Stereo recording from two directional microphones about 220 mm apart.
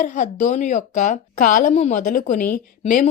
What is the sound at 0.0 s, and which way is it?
Speech, 35° left (ahead or behind).